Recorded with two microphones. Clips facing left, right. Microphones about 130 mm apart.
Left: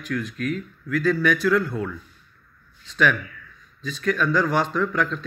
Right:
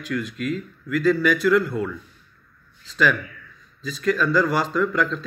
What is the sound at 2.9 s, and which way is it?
Speech, 5° right (ahead or behind).